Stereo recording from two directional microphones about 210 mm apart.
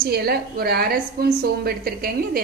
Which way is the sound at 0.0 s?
50° right (ahead or behind).